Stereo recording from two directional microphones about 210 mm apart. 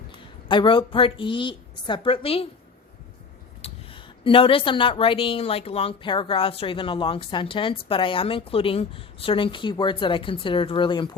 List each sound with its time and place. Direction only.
0.4 s a woman's voice: 20° left (ahead or behind)
3.6 s a woman's voice: 25° left (ahead or behind)